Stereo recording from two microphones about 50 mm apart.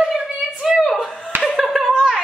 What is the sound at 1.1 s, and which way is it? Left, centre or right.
Laughter, centre.